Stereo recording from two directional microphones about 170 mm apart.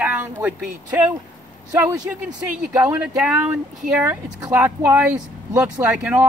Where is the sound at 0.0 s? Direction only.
10° right (ahead or behind).